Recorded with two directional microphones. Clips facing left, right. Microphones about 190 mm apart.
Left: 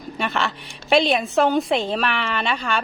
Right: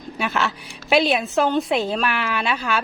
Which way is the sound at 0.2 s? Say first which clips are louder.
Right 1 dB; 5° right (ahead or behind).